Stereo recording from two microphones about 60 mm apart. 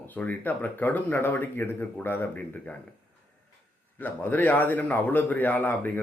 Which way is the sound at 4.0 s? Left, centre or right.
Left.